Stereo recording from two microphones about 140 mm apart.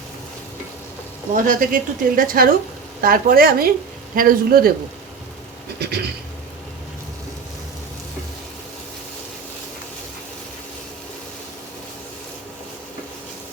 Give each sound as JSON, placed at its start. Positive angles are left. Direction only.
{"t": 1.3, "sound": "a woman's voice", "side_deg": -70}